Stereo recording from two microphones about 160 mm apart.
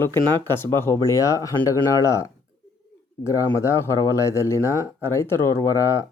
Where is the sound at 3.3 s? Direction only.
20° left (ahead or behind).